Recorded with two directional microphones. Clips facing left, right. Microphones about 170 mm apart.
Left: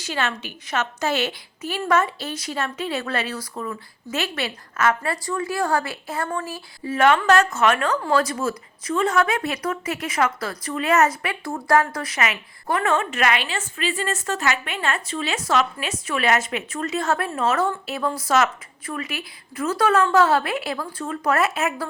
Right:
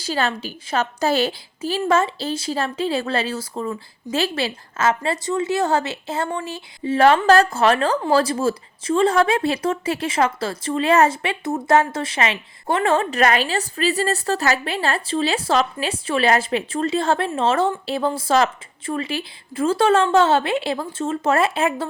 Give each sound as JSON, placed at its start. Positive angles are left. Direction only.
{"t": 0.0, "sound": "a woman's voice", "side_deg": -35}